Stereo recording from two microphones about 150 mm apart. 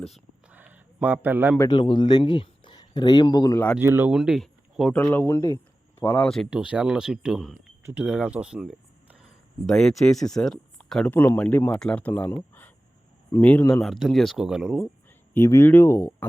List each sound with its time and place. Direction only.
0.5 s a sound: 10° right (ahead or behind)
1.7 s speech: 30° left (ahead or behind)
3.8 s speech: 15° right (ahead or behind)
4.1 s speech: centre (ahead or behind)
4.9 s speech: 10° left (ahead or behind)
13.4 s speech: 10° left (ahead or behind)
13.8 s speech: centre (ahead or behind)
15.3 s speech: 15° left (ahead or behind)